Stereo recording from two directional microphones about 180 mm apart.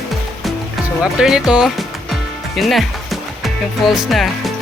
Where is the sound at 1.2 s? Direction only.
5° right (ahead or behind).